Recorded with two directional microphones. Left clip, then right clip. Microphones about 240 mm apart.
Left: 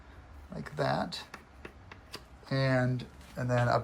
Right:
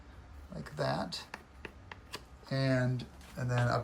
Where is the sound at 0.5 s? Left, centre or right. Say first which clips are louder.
Left 3 dB; centre.